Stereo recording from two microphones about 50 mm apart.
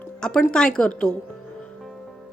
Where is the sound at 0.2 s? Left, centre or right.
Centre.